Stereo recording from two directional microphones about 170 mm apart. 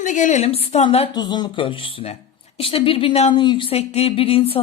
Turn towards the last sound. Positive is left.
turn(degrees=35)  # may be behind; listen again after turning